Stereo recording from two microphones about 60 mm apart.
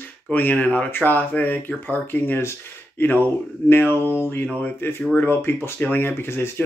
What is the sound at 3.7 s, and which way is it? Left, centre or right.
Speech, left.